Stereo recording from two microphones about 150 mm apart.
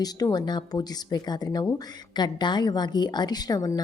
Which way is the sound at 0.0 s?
25° left (ahead or behind).